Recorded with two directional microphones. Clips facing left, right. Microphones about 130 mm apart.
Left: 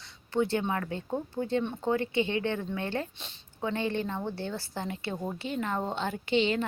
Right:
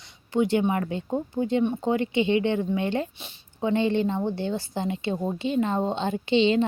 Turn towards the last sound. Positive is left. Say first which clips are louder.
# right 6 dB
turn(degrees=-20)  # may be behind; listen again after turning